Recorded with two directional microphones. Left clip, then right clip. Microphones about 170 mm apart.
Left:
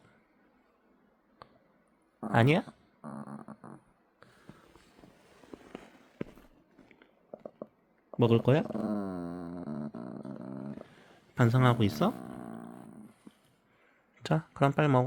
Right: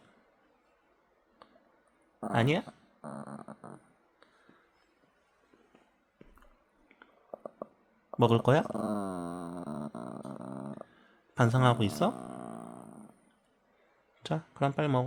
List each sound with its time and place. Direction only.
1.4 s clicking: 15° left (ahead or behind)
2.3 s speech: 15° left (ahead or behind)
2.6 s a sound: 10° right (ahead or behind)
6.8 s chewing: 25° right (ahead or behind)
8.1 s dog: 25° right (ahead or behind)
11.3 s speech: 10° right (ahead or behind)
12.1 s a sound: 20° right (ahead or behind)
14.2 s speech: 15° left (ahead or behind)